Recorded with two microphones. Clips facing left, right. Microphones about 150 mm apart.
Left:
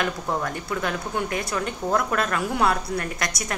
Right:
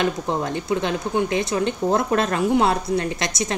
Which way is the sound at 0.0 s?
25° right (ahead or behind).